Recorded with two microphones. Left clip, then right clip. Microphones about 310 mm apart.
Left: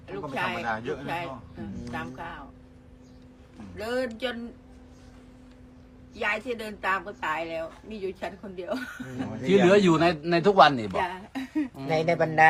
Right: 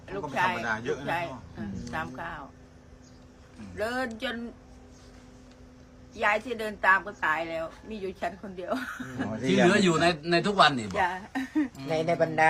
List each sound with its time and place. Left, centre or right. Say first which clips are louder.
0.3 s speech: right 3 dB; centre
0.6 s speech: even; centre
3.8 s speech: left 1 dB; centre
6.1 s speech: right 2 dB; centre
9.6 s speech: left 3 dB; centre
11.0 s speech: right 3 dB; centre
11.8 s speech: left 3 dB; left